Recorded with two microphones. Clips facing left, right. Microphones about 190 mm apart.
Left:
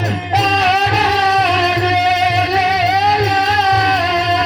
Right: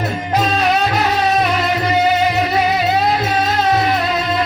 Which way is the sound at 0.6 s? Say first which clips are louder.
Left 1 dB; 75° left (ahead or behind).